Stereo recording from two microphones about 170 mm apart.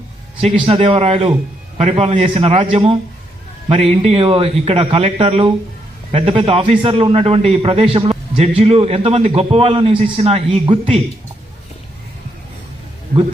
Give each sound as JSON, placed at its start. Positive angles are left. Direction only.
{"t": 0.3, "sound": "a man's voice", "side_deg": -30}